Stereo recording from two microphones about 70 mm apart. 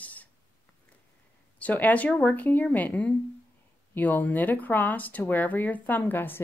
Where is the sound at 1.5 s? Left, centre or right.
Left.